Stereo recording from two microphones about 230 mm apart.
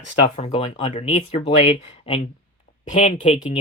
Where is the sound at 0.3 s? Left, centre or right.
Left.